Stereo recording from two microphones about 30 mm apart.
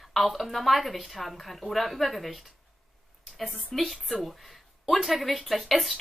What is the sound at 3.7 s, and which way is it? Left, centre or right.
Speech, left.